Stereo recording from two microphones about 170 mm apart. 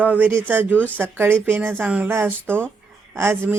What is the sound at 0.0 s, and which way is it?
Speech, 10° right (ahead or behind).